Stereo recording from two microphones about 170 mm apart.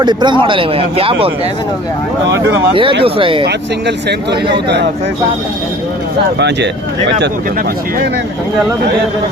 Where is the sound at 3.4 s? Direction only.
75° right (ahead or behind).